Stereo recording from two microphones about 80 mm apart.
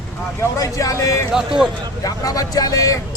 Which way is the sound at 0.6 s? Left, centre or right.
Left.